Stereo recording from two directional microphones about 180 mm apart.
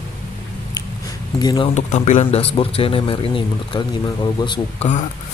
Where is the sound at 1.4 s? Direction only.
20° left (ahead or behind).